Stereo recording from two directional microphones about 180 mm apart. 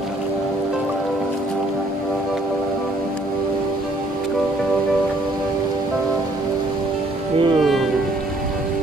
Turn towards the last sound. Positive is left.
turn(degrees=0)  # may be behind; listen again after turning